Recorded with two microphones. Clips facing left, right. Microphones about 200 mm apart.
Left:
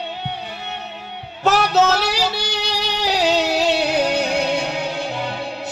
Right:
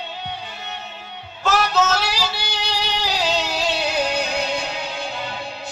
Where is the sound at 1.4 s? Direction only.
65° left (ahead or behind).